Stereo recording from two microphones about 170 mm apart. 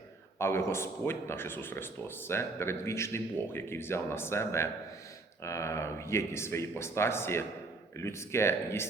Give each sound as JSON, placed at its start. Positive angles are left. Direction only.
{"t": 0.3, "sound": "a man's voice", "side_deg": 15}